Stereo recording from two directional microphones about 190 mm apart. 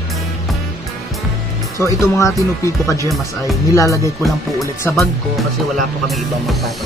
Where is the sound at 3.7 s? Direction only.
15° left (ahead or behind).